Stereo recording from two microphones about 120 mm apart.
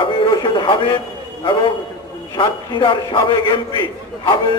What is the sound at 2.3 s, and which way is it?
A man's voice, 45° left (ahead or behind).